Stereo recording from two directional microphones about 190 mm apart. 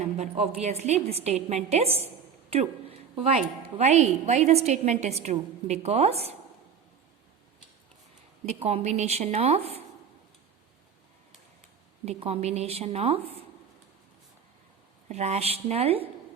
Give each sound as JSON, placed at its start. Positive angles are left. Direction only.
{"t": 0.0, "sound": "a woman's voice", "side_deg": -35}
{"t": 8.5, "sound": "a woman's voice", "side_deg": -30}
{"t": 12.0, "sound": "a woman's voice", "side_deg": -30}
{"t": 15.1, "sound": "a woman's voice", "side_deg": -35}